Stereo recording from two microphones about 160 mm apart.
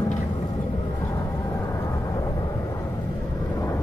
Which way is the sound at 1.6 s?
20° left (ahead or behind).